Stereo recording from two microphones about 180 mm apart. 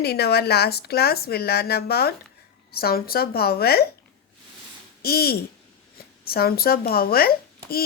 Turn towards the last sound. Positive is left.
turn(degrees=55)  # may be behind; listen again after turning